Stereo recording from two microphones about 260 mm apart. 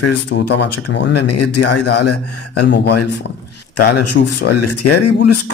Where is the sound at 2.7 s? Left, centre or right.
Left.